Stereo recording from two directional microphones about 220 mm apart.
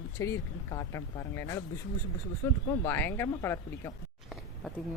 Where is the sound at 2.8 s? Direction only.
10° left (ahead or behind).